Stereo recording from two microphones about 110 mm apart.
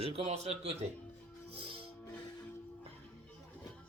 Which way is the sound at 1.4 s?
55° right (ahead or behind).